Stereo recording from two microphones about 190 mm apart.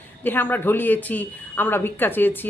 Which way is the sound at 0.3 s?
10° left (ahead or behind).